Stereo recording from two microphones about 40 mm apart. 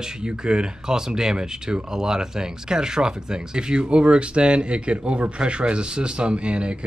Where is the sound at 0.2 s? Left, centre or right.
Right.